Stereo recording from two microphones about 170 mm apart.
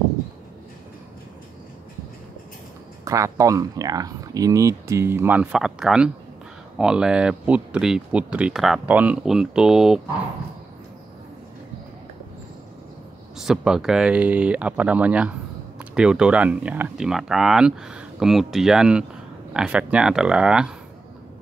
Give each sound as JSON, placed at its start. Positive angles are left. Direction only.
{"t": 3.1, "sound": "speech", "side_deg": -20}
{"t": 13.4, "sound": "speech", "side_deg": 0}